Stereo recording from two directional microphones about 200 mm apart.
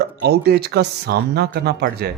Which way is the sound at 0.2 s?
55° right (ahead or behind).